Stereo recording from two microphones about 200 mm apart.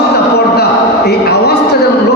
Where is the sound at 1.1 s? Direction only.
55° left (ahead or behind).